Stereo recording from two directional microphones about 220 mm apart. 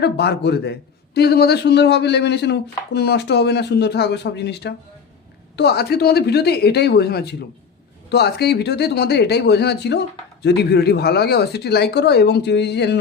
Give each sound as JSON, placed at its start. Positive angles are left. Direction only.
{"t": 0.0, "sound": "a man's voice", "side_deg": 50}